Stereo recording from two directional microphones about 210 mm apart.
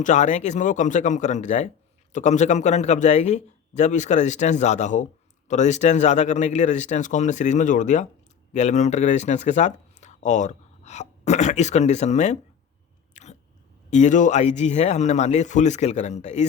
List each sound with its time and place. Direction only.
0.0 s a man's voice: 35° left (ahead or behind)
13.2 s biting: 35° left (ahead or behind)
13.9 s a man's voice: 35° left (ahead or behind)